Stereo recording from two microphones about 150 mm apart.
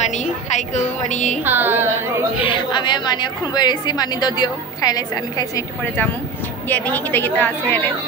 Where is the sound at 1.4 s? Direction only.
15° right (ahead or behind).